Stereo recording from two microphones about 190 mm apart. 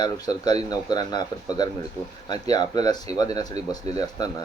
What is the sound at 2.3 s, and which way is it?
A man's voice, 20° left (ahead or behind).